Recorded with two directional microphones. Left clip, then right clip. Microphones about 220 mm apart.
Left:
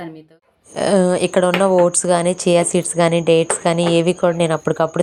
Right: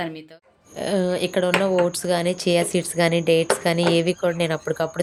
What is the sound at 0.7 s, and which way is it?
Speech, 25° left (ahead or behind).